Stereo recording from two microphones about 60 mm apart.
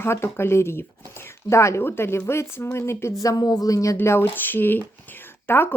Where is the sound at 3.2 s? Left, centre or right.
Left.